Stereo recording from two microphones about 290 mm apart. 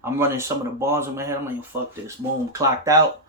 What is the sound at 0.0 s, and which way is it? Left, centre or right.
Speech, centre.